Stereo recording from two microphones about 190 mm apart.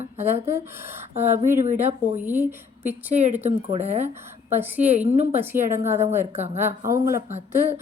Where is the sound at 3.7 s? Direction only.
35° right (ahead or behind).